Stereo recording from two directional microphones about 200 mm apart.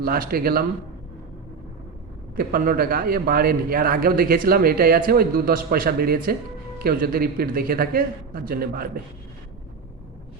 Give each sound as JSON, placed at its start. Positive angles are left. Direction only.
{"t": 0.0, "sound": "a man's voice", "side_deg": -45}
{"t": 2.3, "sound": "a man's voice", "side_deg": -45}